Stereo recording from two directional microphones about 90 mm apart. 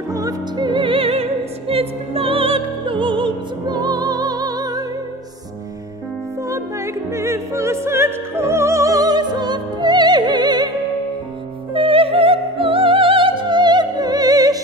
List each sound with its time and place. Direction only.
0.1 s music: 40° right (ahead or behind)
0.7 s music: 70° right (ahead or behind); by 4.8 s 45° right (ahead or behind)
6.5 s music: 30° right (ahead or behind); by 10.7 s 50° right (ahead or behind)
11.7 s music: 90° right; by 14.6 s 45° right (ahead or behind)